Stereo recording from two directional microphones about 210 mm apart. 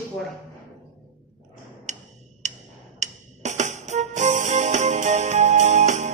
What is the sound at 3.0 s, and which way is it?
Music, 35° right (ahead or behind).